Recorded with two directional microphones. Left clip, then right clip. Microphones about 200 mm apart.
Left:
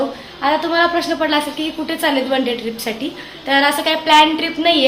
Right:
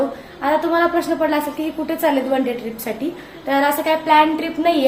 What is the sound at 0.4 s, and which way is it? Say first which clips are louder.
A woman's voice: left 2 dB; 5° right (ahead or behind).